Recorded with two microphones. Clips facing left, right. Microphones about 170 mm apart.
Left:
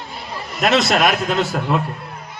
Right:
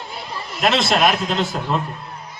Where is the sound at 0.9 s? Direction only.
50° left (ahead or behind).